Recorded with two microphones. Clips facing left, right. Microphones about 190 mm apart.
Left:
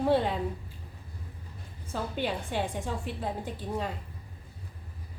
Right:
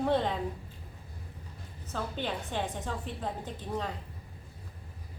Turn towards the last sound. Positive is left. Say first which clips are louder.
# left 2 dB
turn(degrees=10)  # may be behind; listen again after turning